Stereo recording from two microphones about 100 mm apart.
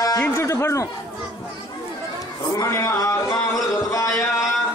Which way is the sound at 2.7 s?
35° left (ahead or behind).